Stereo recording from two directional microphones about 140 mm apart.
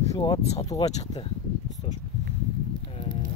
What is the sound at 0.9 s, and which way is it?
Speech, 55° left (ahead or behind).